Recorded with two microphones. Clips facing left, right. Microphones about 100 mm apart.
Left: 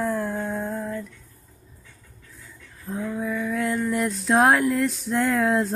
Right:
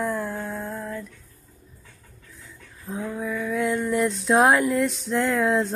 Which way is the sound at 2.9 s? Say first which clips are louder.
Left 1 dB; 5° right (ahead or behind).